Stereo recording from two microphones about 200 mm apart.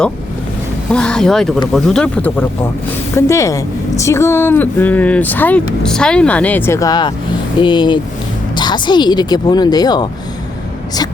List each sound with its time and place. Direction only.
0.9 s speech: 5° left (ahead or behind); by 10.1 s 20° left (ahead or behind)